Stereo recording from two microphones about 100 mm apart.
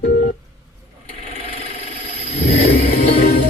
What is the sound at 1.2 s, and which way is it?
Engine, 85° left.